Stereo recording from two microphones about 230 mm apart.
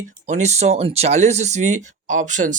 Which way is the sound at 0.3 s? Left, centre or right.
Right.